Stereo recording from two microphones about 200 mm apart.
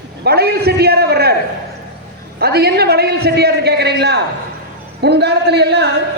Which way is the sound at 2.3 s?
50° right (ahead or behind).